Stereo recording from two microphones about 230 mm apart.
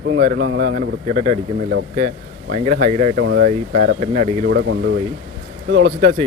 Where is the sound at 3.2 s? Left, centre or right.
Right.